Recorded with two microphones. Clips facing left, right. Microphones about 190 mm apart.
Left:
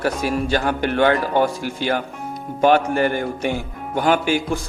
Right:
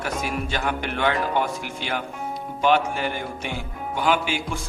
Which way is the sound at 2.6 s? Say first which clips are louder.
Left 5 dB; 45° left (ahead or behind).